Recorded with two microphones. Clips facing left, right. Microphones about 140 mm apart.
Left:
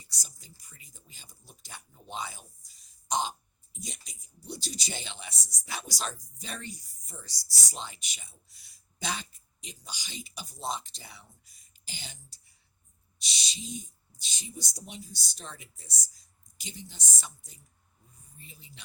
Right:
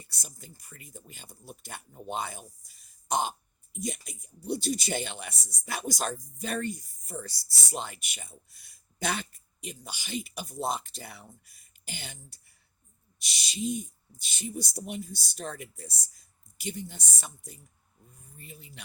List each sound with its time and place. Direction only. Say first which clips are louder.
0.0 s speech: right 5 dB; 55° right (ahead or behind)